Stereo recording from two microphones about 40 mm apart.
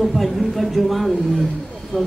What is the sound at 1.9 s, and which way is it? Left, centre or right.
Speech, left.